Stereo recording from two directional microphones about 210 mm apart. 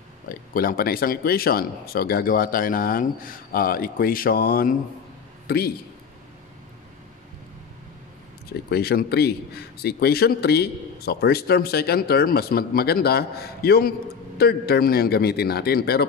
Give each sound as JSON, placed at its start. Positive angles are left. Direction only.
{"t": 0.3, "sound": "a man's voice", "side_deg": 45}
{"t": 8.6, "sound": "a man's voice", "side_deg": 50}